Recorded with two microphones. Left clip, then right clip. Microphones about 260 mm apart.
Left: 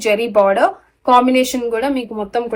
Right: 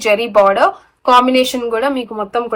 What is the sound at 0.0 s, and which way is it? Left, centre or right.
Speech, right.